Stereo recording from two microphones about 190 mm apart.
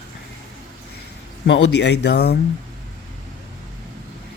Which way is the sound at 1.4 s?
70° left (ahead or behind).